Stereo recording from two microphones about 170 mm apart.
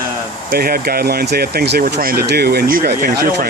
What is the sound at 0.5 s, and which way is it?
Speech, 60° right (ahead or behind).